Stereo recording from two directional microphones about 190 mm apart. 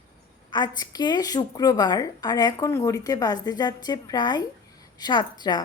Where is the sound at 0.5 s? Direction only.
20° left (ahead or behind).